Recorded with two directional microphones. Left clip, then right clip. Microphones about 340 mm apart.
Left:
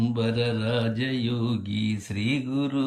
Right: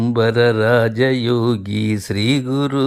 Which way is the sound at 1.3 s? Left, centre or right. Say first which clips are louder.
Right 13 dB; right.